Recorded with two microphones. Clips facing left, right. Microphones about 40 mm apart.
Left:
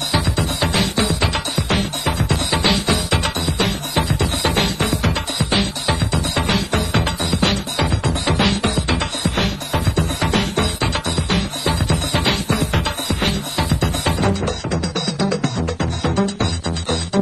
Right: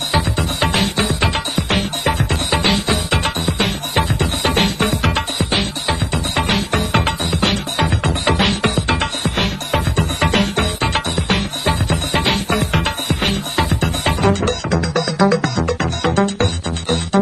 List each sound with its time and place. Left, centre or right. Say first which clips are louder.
0.1 s music: right 2 dB; right
16.2 s music: right 3 dB; right